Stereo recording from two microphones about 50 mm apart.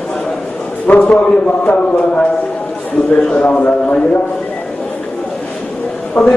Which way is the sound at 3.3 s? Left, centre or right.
Left.